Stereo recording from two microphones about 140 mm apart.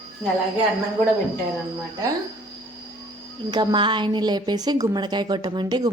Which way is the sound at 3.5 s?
30° right (ahead or behind).